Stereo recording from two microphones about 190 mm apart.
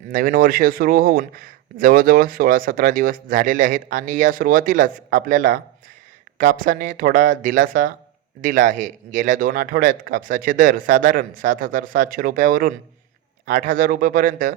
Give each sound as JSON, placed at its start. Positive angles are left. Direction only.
{"t": 0.1, "sound": "speech", "side_deg": -45}